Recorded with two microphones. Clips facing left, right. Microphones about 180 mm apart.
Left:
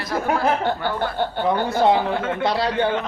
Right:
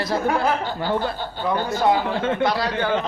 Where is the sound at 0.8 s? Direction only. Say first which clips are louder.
Left 1 dB; 60° left (ahead or behind).